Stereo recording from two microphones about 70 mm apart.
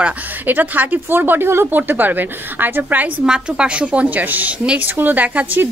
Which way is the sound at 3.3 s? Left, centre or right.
Centre.